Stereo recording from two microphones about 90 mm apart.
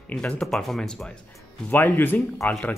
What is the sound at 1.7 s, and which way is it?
Speech, 20° left (ahead or behind).